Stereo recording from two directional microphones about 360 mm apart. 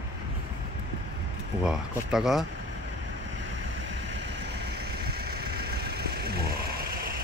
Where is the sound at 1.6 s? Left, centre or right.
Centre.